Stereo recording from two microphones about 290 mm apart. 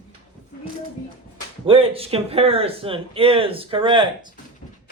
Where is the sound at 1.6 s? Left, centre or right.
Centre.